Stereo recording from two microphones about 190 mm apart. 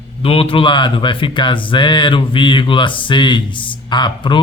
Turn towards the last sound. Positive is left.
turn(degrees=25)  # may be behind; listen again after turning